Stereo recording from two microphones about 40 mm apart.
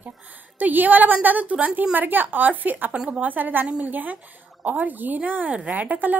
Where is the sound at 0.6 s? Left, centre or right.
Right.